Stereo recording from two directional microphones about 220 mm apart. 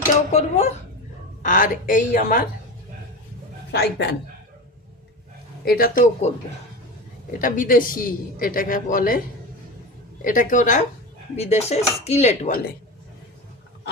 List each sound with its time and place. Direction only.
0.3 s a man's voice: 30° left (ahead or behind)
3.7 s a woman's voice: 50° left (ahead or behind)
5.6 s a man's voice: 40° left (ahead or behind)
10.2 s a man's voice: 35° left (ahead or behind)